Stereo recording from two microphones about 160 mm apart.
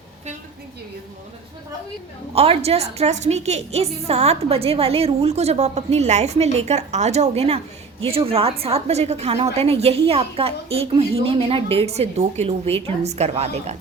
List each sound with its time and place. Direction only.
2.3 s a woman's voice: 40° right (ahead or behind)